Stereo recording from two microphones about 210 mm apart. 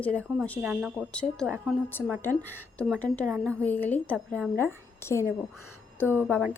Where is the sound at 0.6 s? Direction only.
5° right (ahead or behind).